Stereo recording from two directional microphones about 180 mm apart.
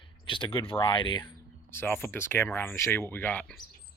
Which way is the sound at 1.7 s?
15° left (ahead or behind).